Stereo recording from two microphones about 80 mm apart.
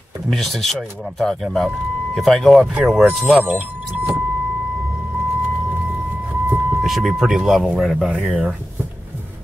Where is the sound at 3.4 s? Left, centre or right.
Right.